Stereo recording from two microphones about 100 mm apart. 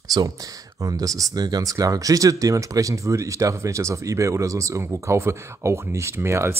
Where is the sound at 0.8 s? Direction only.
35° right (ahead or behind).